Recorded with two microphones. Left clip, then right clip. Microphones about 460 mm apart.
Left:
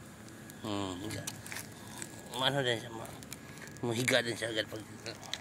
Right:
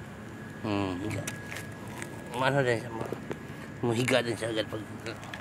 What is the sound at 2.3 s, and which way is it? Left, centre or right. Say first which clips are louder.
Speech: right 5 dB; left.